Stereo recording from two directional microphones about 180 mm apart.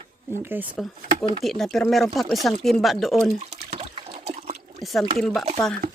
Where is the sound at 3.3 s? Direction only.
35° right (ahead or behind).